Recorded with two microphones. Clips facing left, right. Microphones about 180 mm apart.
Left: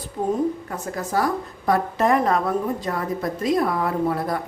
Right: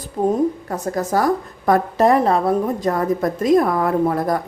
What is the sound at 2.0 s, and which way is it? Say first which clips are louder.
Mantra: right 4 dB; 30° right (ahead or behind).